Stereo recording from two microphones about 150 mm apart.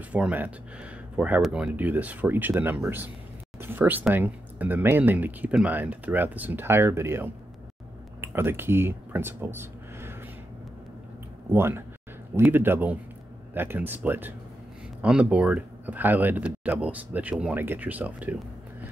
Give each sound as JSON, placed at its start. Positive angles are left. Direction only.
{"t": 0.1, "sound": "speech", "side_deg": -10}
{"t": 11.5, "sound": "speech", "side_deg": -15}